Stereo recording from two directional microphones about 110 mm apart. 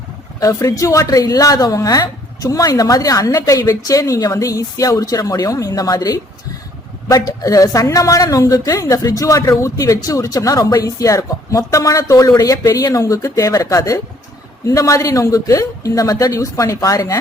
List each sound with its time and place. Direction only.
0.3 s a woman's voice: 30° left (ahead or behind)
7.1 s a woman's voice: 30° left (ahead or behind)